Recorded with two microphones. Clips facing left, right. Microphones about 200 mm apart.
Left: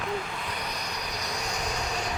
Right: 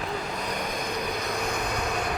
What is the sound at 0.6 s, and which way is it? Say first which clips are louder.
Train: right 6 dB; 50° right (ahead or behind).